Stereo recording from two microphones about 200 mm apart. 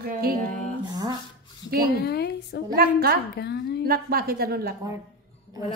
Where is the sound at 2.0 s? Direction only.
55° left (ahead or behind).